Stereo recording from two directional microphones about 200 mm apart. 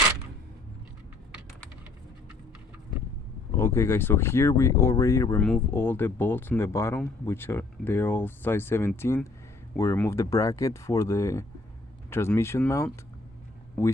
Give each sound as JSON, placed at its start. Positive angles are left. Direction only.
{"t": 3.6, "sound": "speech", "side_deg": 10}